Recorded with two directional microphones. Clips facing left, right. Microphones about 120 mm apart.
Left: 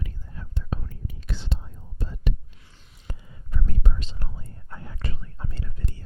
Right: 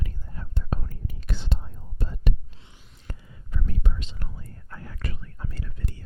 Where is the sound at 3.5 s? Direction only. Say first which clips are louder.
Left 1 dB; 40° left (ahead or behind).